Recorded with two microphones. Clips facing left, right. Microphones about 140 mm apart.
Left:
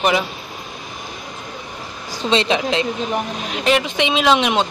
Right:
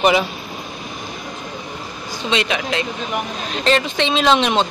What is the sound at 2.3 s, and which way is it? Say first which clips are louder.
Speech: left 3 dB; 30° left (ahead or behind).